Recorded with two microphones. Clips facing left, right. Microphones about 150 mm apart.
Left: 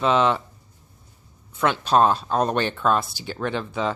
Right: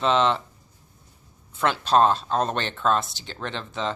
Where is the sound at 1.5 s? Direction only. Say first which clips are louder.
Left 1 dB; centre (ahead or behind).